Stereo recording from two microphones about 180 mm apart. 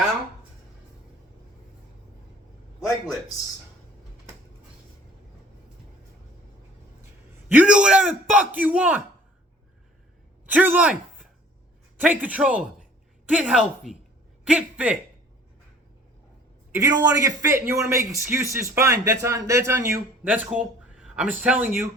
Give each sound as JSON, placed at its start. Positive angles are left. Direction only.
{"t": 7.4, "sound": "a man's voice", "side_deg": -10}
{"t": 10.4, "sound": "a man's voice", "side_deg": -10}
{"t": 16.7, "sound": "a man's voice", "side_deg": -20}